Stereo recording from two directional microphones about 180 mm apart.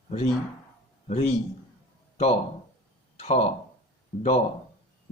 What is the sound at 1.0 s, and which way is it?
A man's voice, 40° left (ahead or behind).